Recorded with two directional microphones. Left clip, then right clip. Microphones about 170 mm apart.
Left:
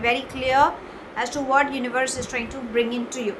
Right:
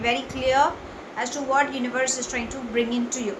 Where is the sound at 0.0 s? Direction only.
35° left (ahead or behind).